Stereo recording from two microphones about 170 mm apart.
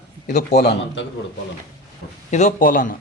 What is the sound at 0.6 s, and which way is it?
Speech, 70° left (ahead or behind).